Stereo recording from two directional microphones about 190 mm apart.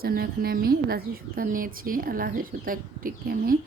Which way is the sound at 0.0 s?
50° right (ahead or behind).